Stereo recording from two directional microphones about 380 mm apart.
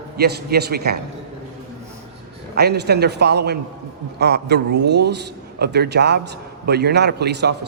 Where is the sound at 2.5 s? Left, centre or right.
Right.